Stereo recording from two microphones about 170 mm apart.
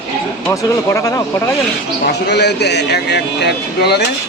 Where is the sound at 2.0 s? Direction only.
75° left (ahead or behind).